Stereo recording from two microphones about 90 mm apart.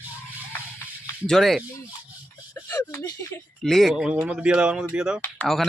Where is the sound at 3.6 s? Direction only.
Centre (ahead or behind).